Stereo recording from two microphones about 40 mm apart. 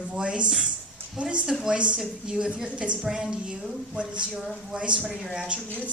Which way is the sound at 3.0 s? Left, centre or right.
Centre.